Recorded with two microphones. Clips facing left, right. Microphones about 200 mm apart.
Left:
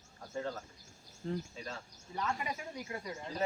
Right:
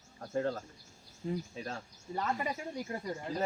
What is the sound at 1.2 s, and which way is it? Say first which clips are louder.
Speech: right 2 dB; 10° right (ahead or behind).